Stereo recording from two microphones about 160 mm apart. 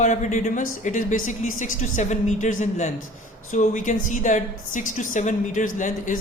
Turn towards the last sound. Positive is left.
turn(degrees=55)  # may be behind; listen again after turning